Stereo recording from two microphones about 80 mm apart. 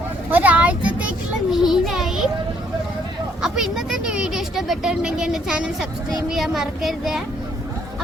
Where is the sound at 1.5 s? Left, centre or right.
Centre.